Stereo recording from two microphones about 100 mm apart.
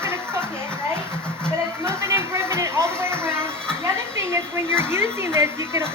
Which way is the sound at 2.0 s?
25° right (ahead or behind).